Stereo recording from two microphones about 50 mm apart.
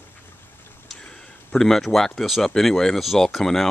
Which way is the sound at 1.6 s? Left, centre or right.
Centre.